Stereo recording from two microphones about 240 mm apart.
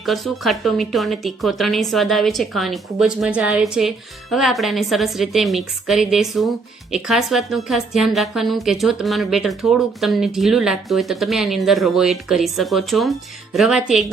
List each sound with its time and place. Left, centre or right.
0.0 s a woman's voice: centre